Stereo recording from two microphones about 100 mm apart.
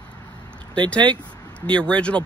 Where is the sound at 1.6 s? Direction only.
10° left (ahead or behind).